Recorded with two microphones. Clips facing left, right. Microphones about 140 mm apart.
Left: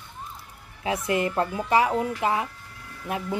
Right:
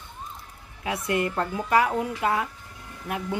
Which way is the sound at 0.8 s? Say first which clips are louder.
Left 1 dB; 25° left (ahead or behind).